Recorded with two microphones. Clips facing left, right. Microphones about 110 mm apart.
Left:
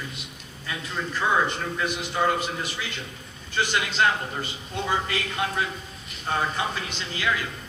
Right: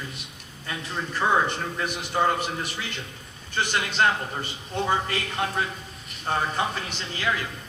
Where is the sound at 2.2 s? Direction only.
35° right (ahead or behind).